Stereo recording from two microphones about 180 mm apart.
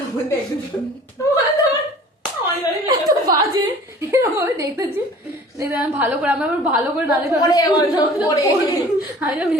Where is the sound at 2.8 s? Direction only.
20° right (ahead or behind).